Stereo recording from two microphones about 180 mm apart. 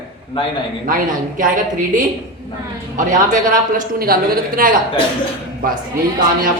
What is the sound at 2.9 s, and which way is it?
A woman's voice, 45° right (ahead or behind).